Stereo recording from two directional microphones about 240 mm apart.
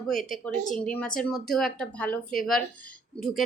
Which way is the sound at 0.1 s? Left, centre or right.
Centre.